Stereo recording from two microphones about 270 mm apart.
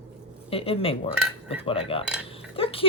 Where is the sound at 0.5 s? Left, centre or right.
Left.